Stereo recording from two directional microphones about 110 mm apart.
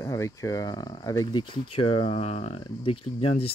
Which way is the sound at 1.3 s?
50° left (ahead or behind).